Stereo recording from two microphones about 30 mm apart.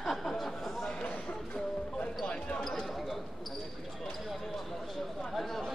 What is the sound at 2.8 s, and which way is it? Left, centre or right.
Basketball bounce, centre.